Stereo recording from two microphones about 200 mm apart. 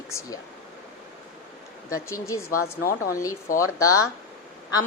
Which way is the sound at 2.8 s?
50° left (ahead or behind).